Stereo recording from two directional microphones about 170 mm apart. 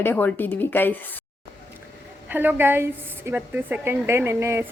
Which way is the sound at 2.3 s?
10° right (ahead or behind).